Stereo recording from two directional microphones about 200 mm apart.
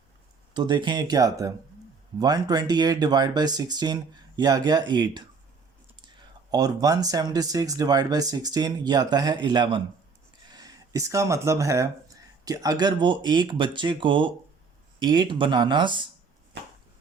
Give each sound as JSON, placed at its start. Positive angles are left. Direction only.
{"t": 0.5, "sound": "speech", "side_deg": -20}